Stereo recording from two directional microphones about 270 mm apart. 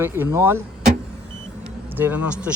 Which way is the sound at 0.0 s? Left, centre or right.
Centre.